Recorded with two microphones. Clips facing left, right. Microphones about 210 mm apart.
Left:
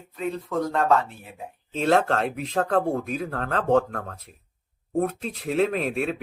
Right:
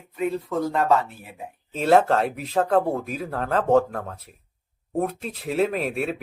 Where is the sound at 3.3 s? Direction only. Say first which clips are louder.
Right 3 dB; 35° right (ahead or behind).